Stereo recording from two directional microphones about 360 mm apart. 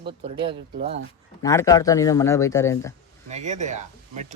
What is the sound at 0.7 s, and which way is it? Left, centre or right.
Speech, right.